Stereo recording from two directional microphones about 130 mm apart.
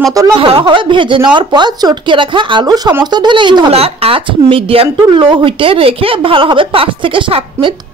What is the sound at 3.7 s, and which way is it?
Speech, 50° right (ahead or behind).